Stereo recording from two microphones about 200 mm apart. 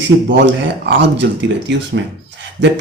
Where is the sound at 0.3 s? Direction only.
65° right (ahead or behind).